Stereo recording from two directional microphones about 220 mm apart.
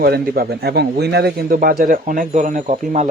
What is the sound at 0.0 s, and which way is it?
A man's voice, 45° right (ahead or behind).